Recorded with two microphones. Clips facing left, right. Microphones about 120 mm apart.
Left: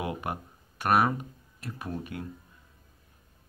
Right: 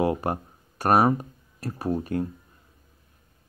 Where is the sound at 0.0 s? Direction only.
35° right (ahead or behind).